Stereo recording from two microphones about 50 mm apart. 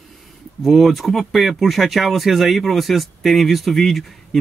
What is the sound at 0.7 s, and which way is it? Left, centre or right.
Speech, centre.